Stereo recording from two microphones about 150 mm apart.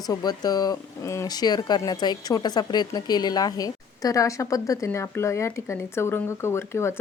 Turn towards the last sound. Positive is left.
turn(degrees=15)  # may be behind; listen again after turning